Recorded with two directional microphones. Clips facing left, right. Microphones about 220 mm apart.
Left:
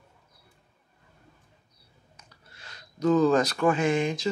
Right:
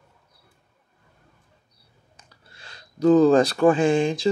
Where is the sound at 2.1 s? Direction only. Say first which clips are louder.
Right 2 dB; 30° right (ahead or behind).